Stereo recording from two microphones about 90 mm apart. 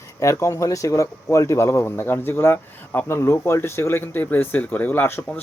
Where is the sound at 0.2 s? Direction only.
35° left (ahead or behind).